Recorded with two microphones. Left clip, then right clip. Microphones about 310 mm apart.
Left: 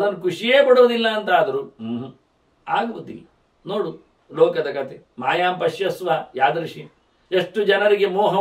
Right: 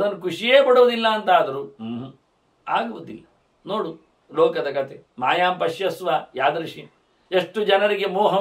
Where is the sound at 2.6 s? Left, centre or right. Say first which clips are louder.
Left 1 dB; centre.